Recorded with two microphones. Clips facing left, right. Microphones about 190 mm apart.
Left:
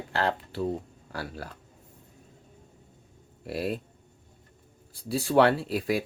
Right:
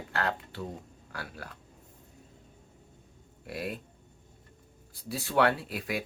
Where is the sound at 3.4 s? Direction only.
30° left (ahead or behind).